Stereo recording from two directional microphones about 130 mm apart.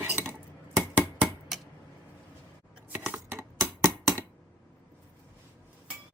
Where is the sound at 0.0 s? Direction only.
20° right (ahead or behind).